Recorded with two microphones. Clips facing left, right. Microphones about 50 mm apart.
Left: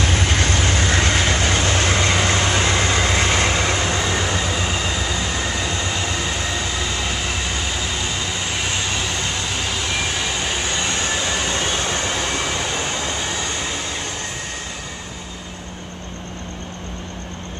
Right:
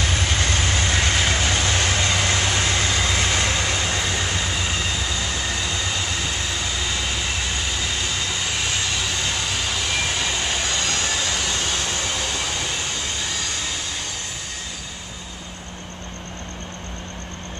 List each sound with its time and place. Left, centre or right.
0.0 s vehicle: left
10.7 s vehicle: left